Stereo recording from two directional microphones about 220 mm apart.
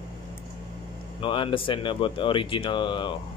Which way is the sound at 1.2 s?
20° left (ahead or behind).